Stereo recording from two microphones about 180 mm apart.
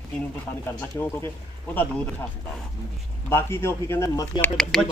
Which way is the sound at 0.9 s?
10° left (ahead or behind).